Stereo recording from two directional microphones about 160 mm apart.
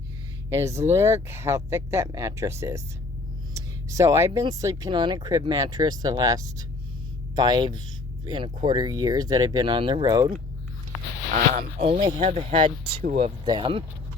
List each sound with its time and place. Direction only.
0.5 s speech: 15° right (ahead or behind)
3.5 s a sound: 20° right (ahead or behind)
4.4 s speech: 20° right (ahead or behind)
11.3 s speech: 45° right (ahead or behind)
13.4 s speech: 30° right (ahead or behind)